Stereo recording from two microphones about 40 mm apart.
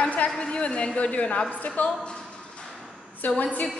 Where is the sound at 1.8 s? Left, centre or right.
Left.